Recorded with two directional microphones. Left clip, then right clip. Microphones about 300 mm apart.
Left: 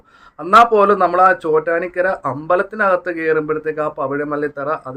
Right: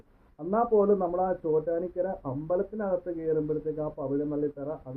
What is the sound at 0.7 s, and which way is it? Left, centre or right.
Speech, left.